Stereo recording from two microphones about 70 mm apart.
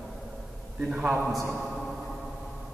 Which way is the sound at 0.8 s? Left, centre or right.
Centre.